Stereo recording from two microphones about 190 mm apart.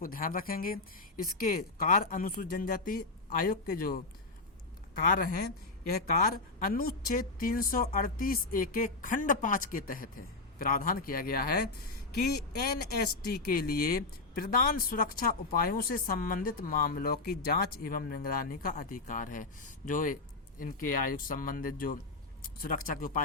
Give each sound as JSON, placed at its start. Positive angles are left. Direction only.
{"t": 0.0, "sound": "speech", "side_deg": 50}
{"t": 5.0, "sound": "speech", "side_deg": 50}
{"t": 13.0, "sound": "speech", "side_deg": 50}